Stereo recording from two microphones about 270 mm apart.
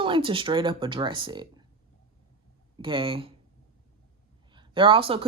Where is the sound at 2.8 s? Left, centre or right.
Centre.